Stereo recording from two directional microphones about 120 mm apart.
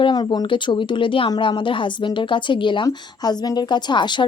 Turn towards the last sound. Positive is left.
turn(degrees=40)  # may be behind; listen again after turning